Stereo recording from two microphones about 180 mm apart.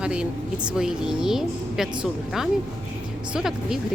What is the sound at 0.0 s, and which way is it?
A woman's voice, 5° right (ahead or behind).